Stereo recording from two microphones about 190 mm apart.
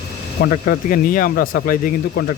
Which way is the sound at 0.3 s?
55° left (ahead or behind).